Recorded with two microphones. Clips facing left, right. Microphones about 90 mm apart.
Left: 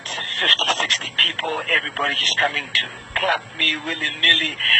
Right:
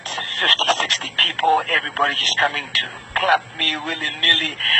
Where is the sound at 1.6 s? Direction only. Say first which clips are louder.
Right 3 dB; 40° right (ahead or behind).